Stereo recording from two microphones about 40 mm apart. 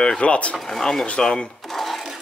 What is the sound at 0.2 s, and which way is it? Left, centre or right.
Speech, left.